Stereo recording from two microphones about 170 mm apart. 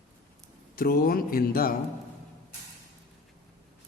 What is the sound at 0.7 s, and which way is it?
Speech, 60° left (ahead or behind).